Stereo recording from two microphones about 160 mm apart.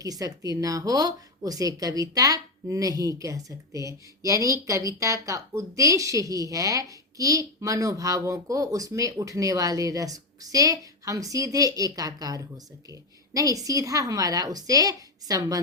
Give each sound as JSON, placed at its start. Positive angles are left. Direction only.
{"t": 0.0, "sound": "a woman's voice", "side_deg": -20}